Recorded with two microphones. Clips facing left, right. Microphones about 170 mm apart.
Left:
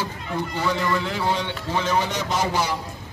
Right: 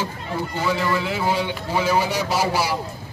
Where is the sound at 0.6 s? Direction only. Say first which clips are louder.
Right 2 dB; 5° right (ahead or behind).